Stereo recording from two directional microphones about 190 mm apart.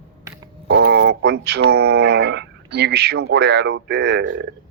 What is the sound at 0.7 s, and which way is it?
Speech, 70° right (ahead or behind).